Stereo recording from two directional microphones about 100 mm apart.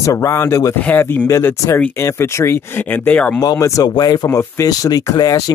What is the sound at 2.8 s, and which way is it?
Speech, 15° left (ahead or behind).